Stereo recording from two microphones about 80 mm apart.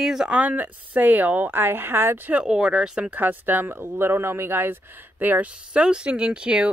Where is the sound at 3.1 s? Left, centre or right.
Right.